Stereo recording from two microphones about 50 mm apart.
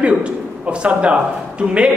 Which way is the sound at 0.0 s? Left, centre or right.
Right.